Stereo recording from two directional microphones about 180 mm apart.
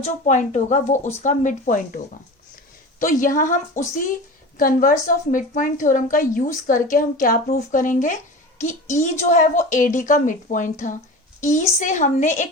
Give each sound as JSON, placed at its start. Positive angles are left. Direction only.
{"t": 0.0, "sound": "a woman's voice", "side_deg": 40}
{"t": 3.0, "sound": "a woman's voice", "side_deg": 50}